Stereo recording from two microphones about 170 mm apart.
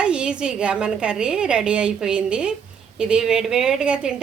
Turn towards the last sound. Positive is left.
turn(degrees=-5)  # may be behind; listen again after turning